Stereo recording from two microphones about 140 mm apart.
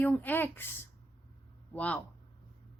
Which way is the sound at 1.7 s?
10° left (ahead or behind).